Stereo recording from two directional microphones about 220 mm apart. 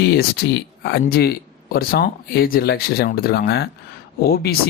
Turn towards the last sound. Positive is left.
turn(degrees=45)  # may be behind; listen again after turning